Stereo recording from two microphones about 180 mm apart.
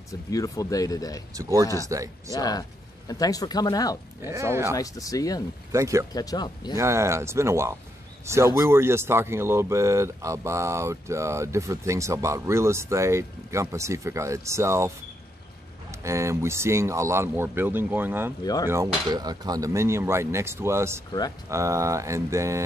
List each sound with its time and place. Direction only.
0.1 s speech: 20° left (ahead or behind)
1.3 s speech: 20° right (ahead or behind)
2.3 s speech: 20° left (ahead or behind)
4.2 s speech: 15° right (ahead or behind)
4.7 s speech: 20° left (ahead or behind)
5.7 s speech: 15° right (ahead or behind)
6.1 s speech: 20° left (ahead or behind)
6.7 s speech: 15° right (ahead or behind)
15.9 s speech: 15° right (ahead or behind)
18.4 s speech: 20° left (ahead or behind)
18.7 s speech: 20° right (ahead or behind)